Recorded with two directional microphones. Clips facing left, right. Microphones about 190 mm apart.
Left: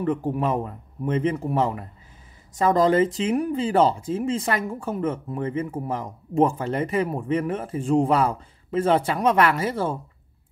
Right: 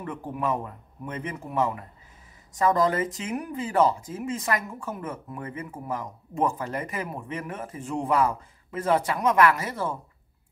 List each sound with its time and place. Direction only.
0.0 s a man's voice: 30° left (ahead or behind)